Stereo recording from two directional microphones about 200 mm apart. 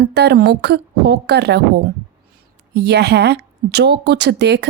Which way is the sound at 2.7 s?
55° right (ahead or behind).